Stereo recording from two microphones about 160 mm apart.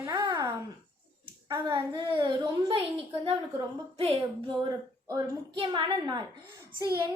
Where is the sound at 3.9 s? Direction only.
35° right (ahead or behind).